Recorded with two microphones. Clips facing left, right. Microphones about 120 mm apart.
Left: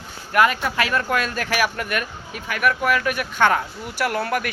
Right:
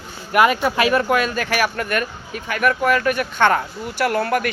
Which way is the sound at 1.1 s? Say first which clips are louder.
Right 3 dB; centre (ahead or behind).